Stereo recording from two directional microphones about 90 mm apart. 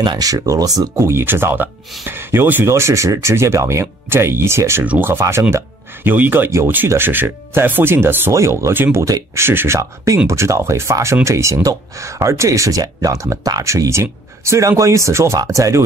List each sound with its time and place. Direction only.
0.0 s speech: 50° right (ahead or behind)
1.0 s speech: 25° right (ahead or behind)